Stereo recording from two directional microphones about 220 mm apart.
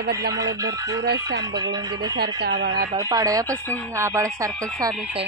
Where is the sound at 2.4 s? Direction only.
55° right (ahead or behind).